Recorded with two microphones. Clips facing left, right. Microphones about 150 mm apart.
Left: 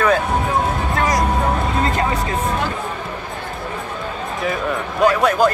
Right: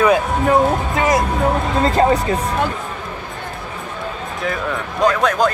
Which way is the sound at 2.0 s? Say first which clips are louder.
Right 11 dB; 35° right (ahead or behind).